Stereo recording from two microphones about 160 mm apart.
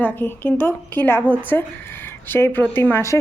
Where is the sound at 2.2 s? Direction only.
15° left (ahead or behind).